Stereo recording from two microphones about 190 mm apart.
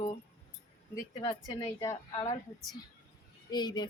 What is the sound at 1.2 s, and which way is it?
Speech, 20° left (ahead or behind).